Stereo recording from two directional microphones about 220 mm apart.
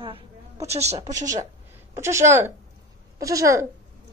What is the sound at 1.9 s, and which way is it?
A woman's voice, 10° right (ahead or behind).